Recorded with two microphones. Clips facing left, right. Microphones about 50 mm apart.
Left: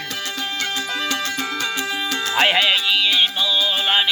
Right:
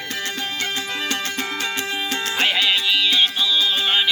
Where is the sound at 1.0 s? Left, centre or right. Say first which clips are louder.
Left 1 dB; right.